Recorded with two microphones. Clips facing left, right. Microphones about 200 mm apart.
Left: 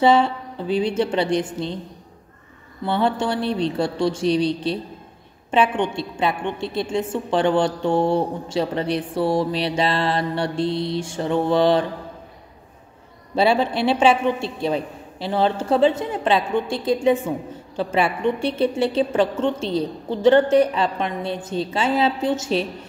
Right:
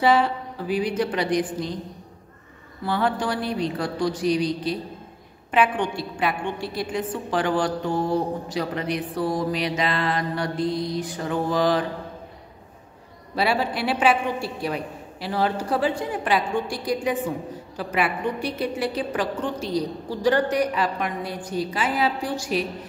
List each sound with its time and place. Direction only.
0.0 s a woman's voice: 25° left (ahead or behind)
2.8 s a woman's voice: 25° left (ahead or behind)
13.4 s a woman's voice: 25° left (ahead or behind)